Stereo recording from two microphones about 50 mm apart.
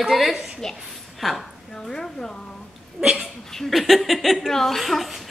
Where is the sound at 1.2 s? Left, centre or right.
Centre.